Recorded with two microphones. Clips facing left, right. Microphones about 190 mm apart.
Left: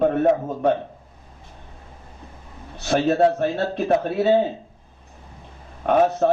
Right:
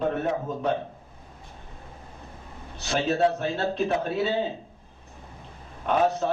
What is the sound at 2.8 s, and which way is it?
A man's voice, 55° left (ahead or behind).